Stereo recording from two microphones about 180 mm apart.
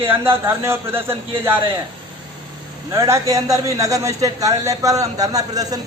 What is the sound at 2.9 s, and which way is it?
A man's voice, 15° right (ahead or behind).